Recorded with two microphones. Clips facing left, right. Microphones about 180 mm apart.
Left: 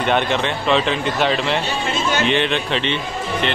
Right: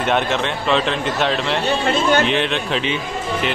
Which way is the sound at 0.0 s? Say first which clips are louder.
Even; centre (ahead or behind).